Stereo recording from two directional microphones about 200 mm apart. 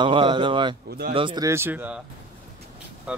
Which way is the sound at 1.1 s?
20° right (ahead or behind).